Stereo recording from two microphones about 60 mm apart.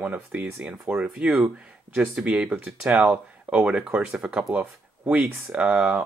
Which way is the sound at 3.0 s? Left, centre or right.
Right.